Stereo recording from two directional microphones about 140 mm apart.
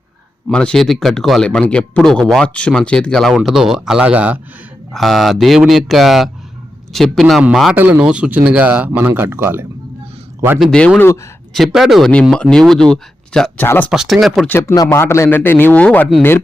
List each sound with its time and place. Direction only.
0.4 s speech: 5° left (ahead or behind); by 9.6 s 15° right (ahead or behind)
10.6 s a man's voice: 5° left (ahead or behind)
11.5 s speech: centre (ahead or behind)
14.4 s a man's voice: 15° left (ahead or behind)